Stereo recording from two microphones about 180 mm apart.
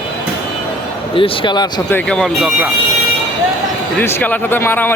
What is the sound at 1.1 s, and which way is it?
Speech, 30° left (ahead or behind).